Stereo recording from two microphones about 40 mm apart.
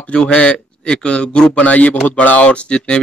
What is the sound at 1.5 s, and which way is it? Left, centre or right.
Speech, left.